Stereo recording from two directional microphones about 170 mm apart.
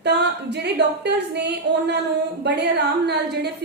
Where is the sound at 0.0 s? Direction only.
85° right.